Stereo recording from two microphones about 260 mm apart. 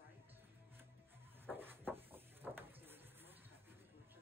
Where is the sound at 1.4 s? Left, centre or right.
Centre.